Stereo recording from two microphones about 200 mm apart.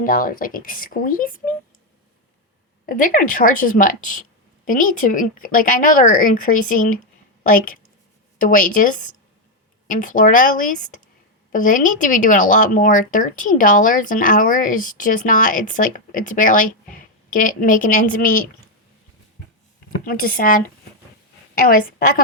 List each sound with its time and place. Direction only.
0.0 s speech: 45° left (ahead or behind)
2.8 s speech: 45° left (ahead or behind)
20.1 s a woman's voice: 45° left (ahead or behind)